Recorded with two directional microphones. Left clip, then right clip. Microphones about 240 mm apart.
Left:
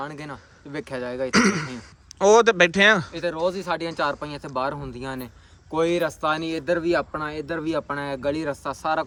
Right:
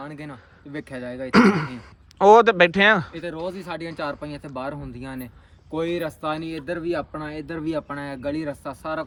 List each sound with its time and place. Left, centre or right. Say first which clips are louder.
0.0 s speech: left 3 dB; centre
1.3 s speech: right 4 dB; centre
3.1 s speech: left 6 dB; centre